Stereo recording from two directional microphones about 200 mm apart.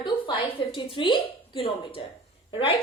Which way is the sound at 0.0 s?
25° left (ahead or behind).